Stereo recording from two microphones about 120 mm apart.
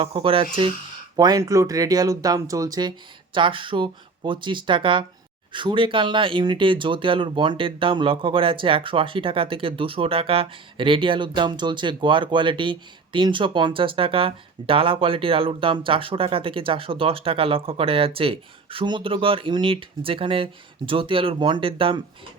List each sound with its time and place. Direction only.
0.0 s speech: 50° right (ahead or behind)
1.1 s speech: 35° right (ahead or behind)
3.3 s speech: 45° right (ahead or behind)